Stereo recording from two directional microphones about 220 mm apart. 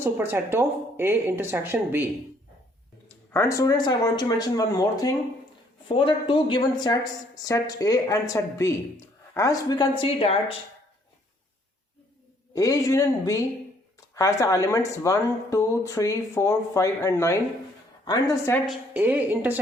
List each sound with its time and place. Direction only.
0.0 s speech: 10° right (ahead or behind)
3.1 s speech: 10° left (ahead or behind)
12.5 s speech: 15° left (ahead or behind)
18.6 s speech: 5° right (ahead or behind)